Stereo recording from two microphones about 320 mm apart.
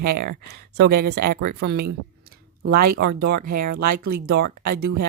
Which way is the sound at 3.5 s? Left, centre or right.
Right.